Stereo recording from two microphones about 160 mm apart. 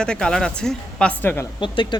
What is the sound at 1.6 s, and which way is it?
Speech, 30° left (ahead or behind).